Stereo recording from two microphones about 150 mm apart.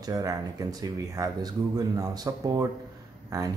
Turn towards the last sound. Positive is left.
turn(degrees=-20)  # may be behind; listen again after turning